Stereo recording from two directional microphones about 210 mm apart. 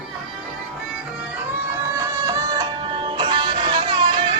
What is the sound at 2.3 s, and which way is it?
Music, 20° right (ahead or behind).